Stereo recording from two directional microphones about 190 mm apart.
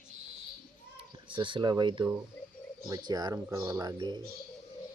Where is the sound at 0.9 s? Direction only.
25° right (ahead or behind).